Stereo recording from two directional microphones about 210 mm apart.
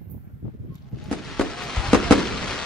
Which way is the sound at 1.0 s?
Centre (ahead or behind).